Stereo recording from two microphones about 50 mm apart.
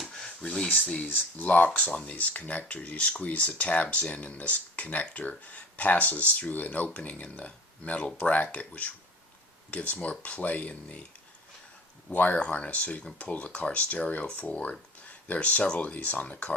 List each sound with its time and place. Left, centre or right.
0.0 s a sound: centre
1.0 s speech: left
12.1 s speech: left